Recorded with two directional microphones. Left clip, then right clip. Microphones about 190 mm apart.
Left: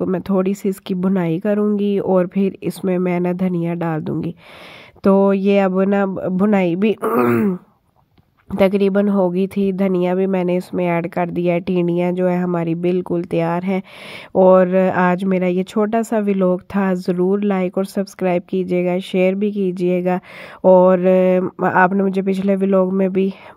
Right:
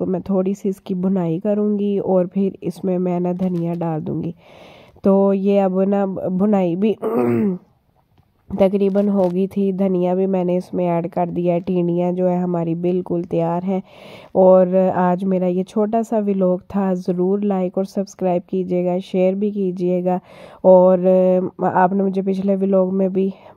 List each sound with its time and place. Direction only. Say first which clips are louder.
0.0 s speech: left 1 dB; 20° left (ahead or behind)